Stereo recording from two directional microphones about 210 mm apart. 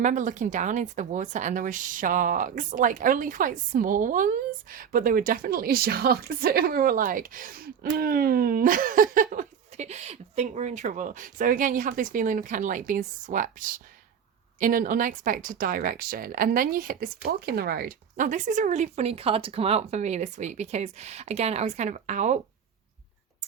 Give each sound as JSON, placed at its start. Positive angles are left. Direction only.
{"t": 0.0, "sound": "speech", "side_deg": -35}